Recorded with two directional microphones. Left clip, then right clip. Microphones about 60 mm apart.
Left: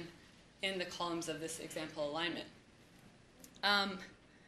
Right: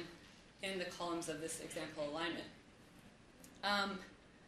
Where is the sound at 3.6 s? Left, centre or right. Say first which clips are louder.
Left 4 dB; left.